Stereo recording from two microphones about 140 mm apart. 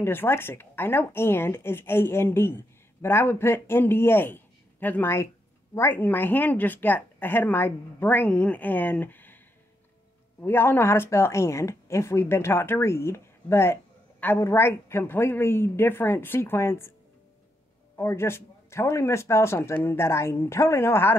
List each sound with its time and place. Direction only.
0.0 s speech: 15° left (ahead or behind)
10.4 s speech: 15° left (ahead or behind)
17.9 s speech: 15° left (ahead or behind)